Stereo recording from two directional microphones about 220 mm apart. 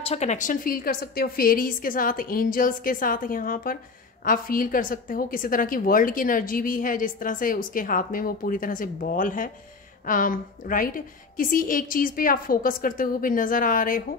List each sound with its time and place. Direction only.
0.0 s a woman's voice: 30° left (ahead or behind)